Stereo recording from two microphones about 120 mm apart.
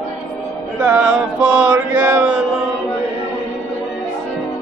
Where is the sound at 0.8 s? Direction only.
10° right (ahead or behind).